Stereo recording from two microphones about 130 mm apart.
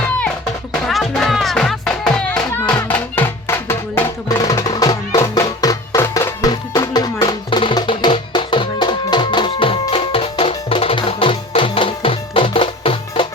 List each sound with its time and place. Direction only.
0.7 s music: centre (ahead or behind); by 13.2 s 45° left (ahead or behind)